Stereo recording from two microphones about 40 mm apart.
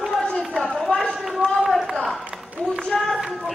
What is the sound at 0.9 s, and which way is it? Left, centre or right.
Run, left.